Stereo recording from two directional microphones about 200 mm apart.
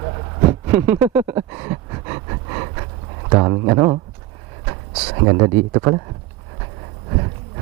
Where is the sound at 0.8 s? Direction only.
15° right (ahead or behind).